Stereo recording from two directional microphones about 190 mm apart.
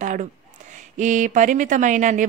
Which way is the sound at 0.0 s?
40° right (ahead or behind).